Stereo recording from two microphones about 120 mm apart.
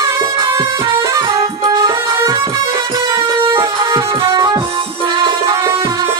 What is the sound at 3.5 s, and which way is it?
Music, 25° right (ahead or behind).